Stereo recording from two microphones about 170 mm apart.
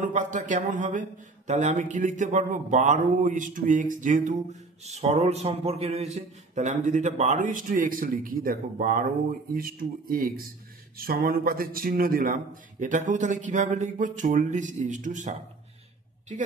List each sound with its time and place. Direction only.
0.0 s speech: 50° right (ahead or behind)